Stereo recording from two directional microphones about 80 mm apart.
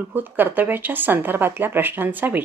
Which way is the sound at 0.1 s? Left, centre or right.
Right.